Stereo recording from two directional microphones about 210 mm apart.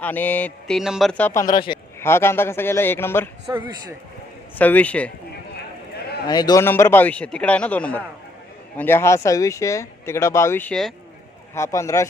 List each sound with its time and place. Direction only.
0.0 s speech: 10° left (ahead or behind)
2.0 s speech: 10° left (ahead or behind)
3.5 s a man's voice: 20° right (ahead or behind)
4.5 s speech: 10° left (ahead or behind)
6.2 s speech: 20° left (ahead or behind)